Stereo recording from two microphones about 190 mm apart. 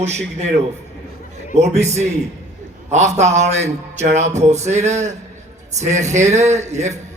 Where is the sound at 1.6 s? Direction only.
35° right (ahead or behind).